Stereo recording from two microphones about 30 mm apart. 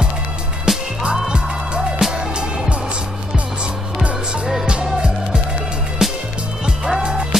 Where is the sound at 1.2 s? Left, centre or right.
Right.